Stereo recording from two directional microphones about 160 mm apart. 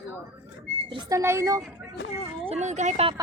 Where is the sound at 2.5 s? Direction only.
45° right (ahead or behind).